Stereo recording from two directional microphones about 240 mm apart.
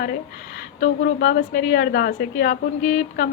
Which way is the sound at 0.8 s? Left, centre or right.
Left.